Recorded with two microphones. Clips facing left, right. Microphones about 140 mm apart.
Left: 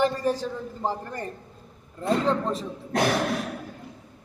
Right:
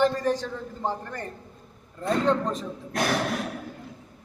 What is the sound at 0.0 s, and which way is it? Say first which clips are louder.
A man's voice: right 1 dB; 10° left (ahead or behind).